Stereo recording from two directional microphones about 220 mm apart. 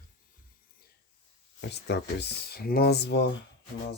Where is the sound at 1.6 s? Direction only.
50° left (ahead or behind).